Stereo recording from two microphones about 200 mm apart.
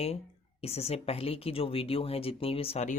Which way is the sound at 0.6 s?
30° left (ahead or behind).